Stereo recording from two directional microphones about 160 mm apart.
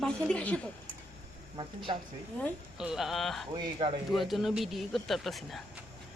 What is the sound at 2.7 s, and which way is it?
Speech, 5° right (ahead or behind).